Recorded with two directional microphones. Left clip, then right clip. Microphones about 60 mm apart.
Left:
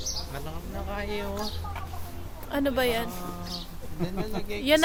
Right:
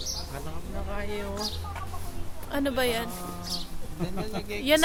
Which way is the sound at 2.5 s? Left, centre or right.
Centre.